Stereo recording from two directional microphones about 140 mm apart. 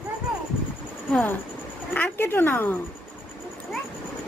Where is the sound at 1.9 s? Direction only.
15° left (ahead or behind).